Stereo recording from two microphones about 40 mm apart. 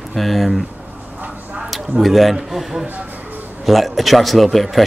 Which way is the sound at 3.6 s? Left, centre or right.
Centre.